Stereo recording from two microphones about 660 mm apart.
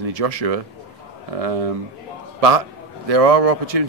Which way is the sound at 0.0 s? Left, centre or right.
Right.